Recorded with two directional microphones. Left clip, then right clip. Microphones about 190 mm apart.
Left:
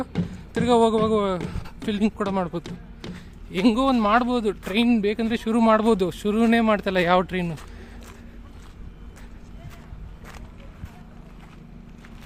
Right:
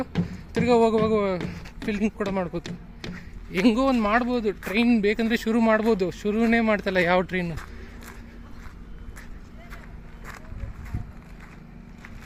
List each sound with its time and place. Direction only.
0.0 s a sound: centre (ahead or behind)
0.7 s speech: 5° left (ahead or behind)
3.5 s speech: centre (ahead or behind)
5.5 s speech: 10° left (ahead or behind)